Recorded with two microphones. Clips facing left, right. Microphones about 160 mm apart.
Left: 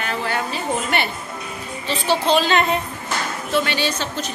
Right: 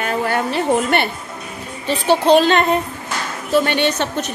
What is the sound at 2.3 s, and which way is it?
A woman's voice, 55° right (ahead or behind).